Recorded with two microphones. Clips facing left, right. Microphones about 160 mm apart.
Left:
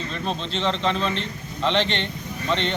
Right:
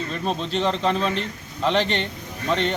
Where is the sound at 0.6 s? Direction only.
5° right (ahead or behind).